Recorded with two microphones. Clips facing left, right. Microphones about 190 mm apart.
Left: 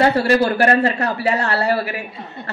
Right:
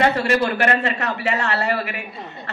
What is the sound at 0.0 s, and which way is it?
A man's voice, 35° left (ahead or behind).